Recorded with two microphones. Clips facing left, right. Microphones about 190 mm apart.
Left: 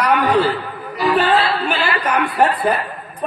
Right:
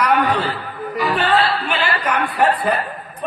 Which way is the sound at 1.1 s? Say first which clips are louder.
Left 2 dB; 35° left (ahead or behind).